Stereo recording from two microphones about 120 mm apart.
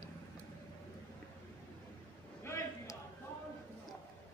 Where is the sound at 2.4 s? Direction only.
25° left (ahead or behind).